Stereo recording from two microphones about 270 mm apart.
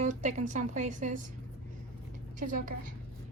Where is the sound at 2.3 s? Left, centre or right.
Right.